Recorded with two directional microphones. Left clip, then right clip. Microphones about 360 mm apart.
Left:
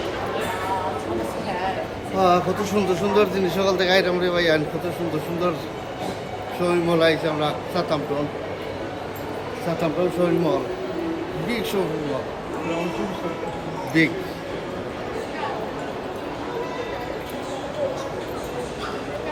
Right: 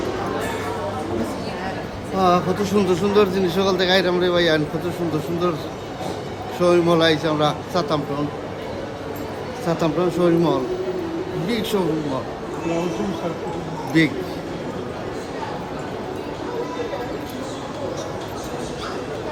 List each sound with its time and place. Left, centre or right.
2.1 s speech: centre
6.6 s a man's voice: centre
9.8 s a man's voice: centre
14.0 s speech: centre